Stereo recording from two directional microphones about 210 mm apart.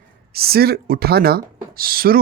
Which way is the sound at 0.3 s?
45° right (ahead or behind).